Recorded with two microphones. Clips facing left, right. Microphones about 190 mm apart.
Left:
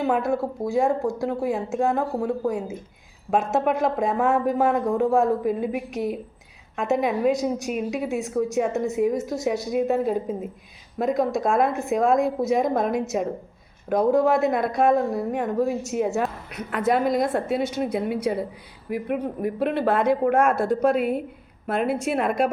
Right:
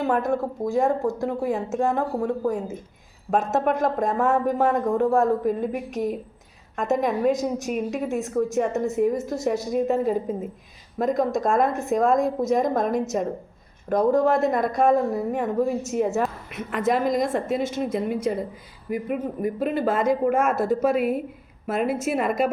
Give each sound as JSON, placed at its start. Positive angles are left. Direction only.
{"t": 0.0, "sound": "speech", "side_deg": 0}
{"t": 15.1, "sound": "speech", "side_deg": -5}